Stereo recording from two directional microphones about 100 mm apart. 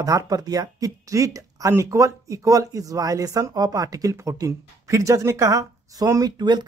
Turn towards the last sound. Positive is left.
turn(degrees=-45)  # may be behind; listen again after turning